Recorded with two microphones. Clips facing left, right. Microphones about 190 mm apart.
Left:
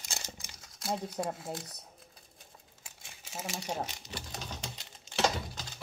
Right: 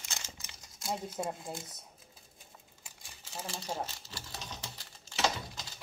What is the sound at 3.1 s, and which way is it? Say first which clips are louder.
Sewing machine: left 2 dB; 10° left (ahead or behind).